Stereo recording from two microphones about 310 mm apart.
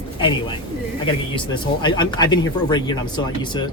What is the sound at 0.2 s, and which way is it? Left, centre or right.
Speech, centre.